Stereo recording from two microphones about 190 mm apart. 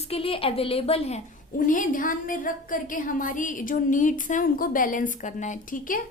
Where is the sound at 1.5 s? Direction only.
45° left (ahead or behind).